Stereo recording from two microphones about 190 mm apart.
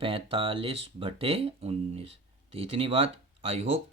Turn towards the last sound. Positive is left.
turn(degrees=-30)  # may be behind; listen again after turning